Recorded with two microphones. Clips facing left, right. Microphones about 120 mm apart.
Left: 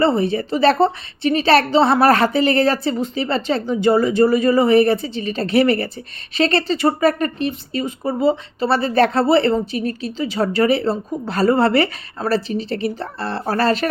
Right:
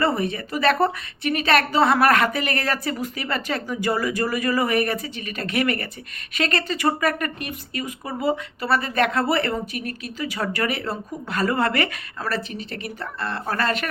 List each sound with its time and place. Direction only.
0.0 s speech: 30° left (ahead or behind)